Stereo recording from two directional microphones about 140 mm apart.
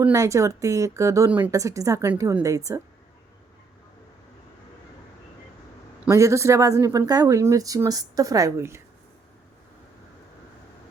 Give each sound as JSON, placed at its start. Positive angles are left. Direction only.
{"t": 0.1, "sound": "speech", "side_deg": -20}
{"t": 6.1, "sound": "speech", "side_deg": -20}